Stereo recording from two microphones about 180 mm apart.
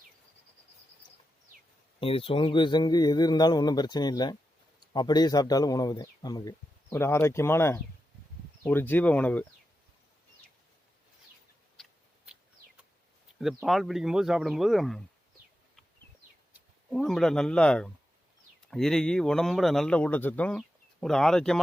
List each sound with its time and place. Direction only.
2.0 s speech: 30° left (ahead or behind); by 9.5 s 10° left (ahead or behind)
11.8 s a sound: 5° right (ahead or behind)
13.4 s a man's voice: centre (ahead or behind)
16.9 s a man's voice: centre (ahead or behind)